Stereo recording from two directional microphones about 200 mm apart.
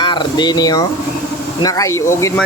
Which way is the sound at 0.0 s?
25° left (ahead or behind).